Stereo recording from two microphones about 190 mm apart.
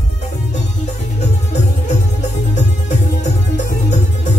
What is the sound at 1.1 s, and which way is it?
Music, 40° left (ahead or behind).